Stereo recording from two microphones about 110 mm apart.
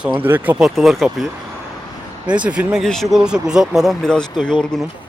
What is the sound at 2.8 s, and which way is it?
Speech, centre (ahead or behind).